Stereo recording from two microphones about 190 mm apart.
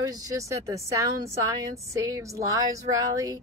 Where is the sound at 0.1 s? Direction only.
15° right (ahead or behind).